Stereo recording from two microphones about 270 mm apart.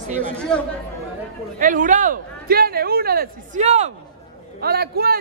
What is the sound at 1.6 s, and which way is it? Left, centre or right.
Speech, right.